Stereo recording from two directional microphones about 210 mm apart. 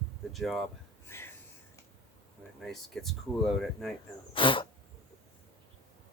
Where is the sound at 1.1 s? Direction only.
10° left (ahead or behind).